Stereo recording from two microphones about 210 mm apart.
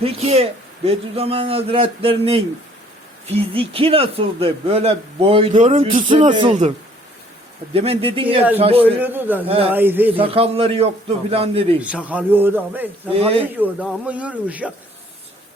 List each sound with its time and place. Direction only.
0.0 s a man's voice: 30° right (ahead or behind)
6.5 s a man's voice: 35° right (ahead or behind)
9.0 s a man's voice: 10° right (ahead or behind)
10.2 s a man's voice: 25° right (ahead or behind)
11.8 s a man's voice: 5° right (ahead or behind)
13.1 s a man's voice: 25° right (ahead or behind)
13.6 s a man's voice: 5° right (ahead or behind)